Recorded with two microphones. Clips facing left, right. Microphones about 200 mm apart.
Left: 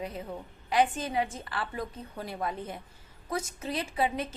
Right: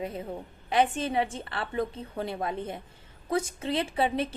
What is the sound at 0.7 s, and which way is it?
A woman's voice, 25° right (ahead or behind).